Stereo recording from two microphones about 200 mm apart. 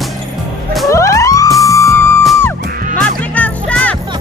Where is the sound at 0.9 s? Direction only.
15° left (ahead or behind).